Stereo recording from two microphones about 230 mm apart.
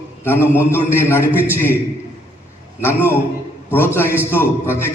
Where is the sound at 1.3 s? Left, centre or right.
Centre.